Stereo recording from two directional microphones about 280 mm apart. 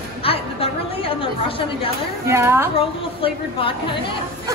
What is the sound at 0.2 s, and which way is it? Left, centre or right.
Chatter, centre.